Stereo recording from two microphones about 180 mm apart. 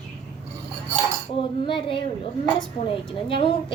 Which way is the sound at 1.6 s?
30° left (ahead or behind).